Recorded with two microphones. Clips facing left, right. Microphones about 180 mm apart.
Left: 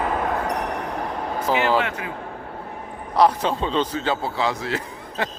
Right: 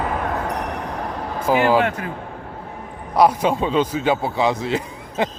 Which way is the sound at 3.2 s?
10° right (ahead or behind).